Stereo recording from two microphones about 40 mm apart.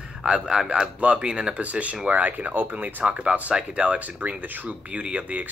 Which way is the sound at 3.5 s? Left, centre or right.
Right.